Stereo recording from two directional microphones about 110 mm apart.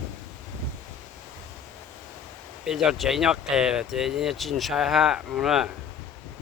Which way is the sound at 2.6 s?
Centre (ahead or behind).